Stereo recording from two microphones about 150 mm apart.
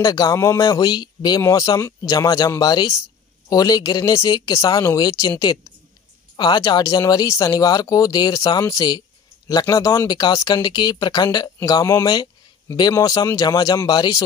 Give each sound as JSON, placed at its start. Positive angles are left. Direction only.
{"t": 0.0, "sound": "speech", "side_deg": 25}